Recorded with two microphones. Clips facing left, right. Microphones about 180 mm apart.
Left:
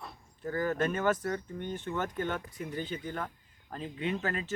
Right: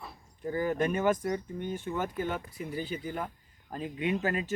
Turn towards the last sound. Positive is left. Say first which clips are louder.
# right 3 dB
turn(degrees=-10)  # may be behind; listen again after turning